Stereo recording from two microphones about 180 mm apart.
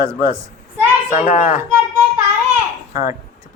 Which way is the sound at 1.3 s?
45° left (ahead or behind).